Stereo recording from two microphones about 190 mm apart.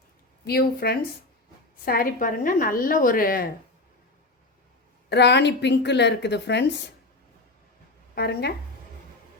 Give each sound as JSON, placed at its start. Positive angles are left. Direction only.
{"t": 0.4, "sound": "a woman's voice", "side_deg": 55}
{"t": 5.0, "sound": "a woman's voice", "side_deg": 60}
{"t": 8.1, "sound": "a woman's voice", "side_deg": 55}